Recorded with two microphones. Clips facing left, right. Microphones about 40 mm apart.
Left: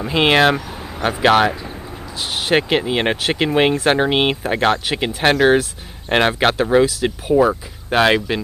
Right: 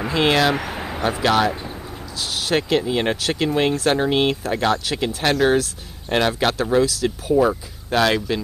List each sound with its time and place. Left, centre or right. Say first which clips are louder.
0.1 s speech: left 4 dB; left
0.6 s vehicle: right 3 dB; right
1.2 s speech: left 5 dB; left